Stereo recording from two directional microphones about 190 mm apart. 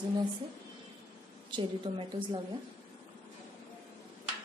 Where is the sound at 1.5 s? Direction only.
25° right (ahead or behind).